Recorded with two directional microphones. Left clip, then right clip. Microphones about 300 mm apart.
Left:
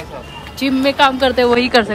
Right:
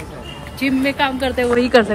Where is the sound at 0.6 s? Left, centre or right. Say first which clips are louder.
Left 5 dB; centre.